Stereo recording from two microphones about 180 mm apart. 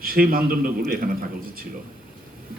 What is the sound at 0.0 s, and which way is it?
Speech, 55° right (ahead or behind).